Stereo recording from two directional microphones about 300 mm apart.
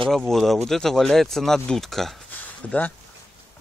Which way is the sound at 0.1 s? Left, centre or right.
Centre.